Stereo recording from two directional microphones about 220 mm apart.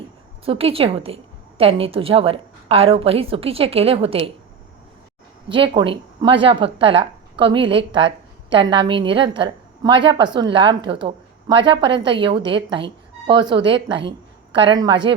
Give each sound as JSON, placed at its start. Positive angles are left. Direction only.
{"t": 0.4, "sound": "speech", "side_deg": -25}
{"t": 5.5, "sound": "speech", "side_deg": -20}